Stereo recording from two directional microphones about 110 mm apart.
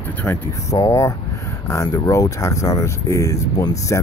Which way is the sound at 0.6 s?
30° left (ahead or behind).